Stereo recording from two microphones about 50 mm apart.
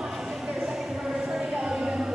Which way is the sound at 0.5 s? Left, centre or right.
Centre.